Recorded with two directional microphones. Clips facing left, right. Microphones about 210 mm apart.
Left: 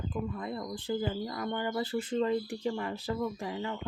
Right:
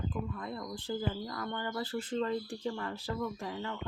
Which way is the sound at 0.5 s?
20° left (ahead or behind).